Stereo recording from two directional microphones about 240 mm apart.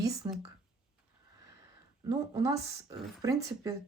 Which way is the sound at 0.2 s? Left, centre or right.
Centre.